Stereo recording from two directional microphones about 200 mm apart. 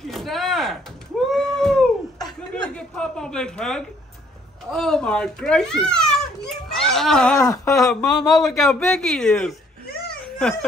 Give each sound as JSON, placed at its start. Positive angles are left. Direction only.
{"t": 0.0, "sound": "a sound", "side_deg": 0}
{"t": 2.5, "sound": "a child's voice", "side_deg": 5}
{"t": 7.4, "sound": "speech", "side_deg": 15}
{"t": 7.7, "sound": "a child's voice", "side_deg": 0}